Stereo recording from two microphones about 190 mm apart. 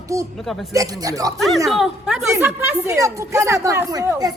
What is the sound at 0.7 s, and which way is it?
Speech, 20° right (ahead or behind).